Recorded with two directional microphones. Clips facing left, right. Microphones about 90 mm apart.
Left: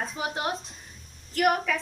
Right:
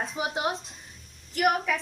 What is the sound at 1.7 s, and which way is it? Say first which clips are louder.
Speech: even; 10° right (ahead or behind).